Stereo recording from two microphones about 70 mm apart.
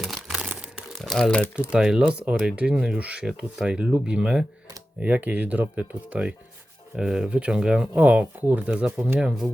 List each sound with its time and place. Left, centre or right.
0.0 s crumpling: centre
0.6 s crumpling: centre
0.9 s crumpling: centre
1.5 s speech: centre
4.9 s speech: right